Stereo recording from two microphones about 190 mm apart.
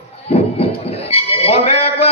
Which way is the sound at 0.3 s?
30° left (ahead or behind).